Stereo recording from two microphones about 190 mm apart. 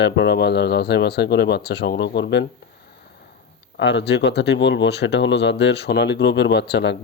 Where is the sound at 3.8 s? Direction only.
70° left (ahead or behind).